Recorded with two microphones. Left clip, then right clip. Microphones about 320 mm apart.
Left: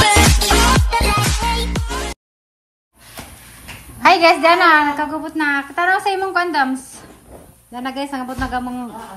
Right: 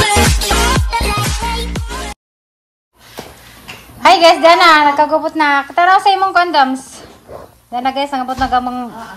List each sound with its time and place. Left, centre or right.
0.0 s music: centre
4.0 s a woman's voice: centre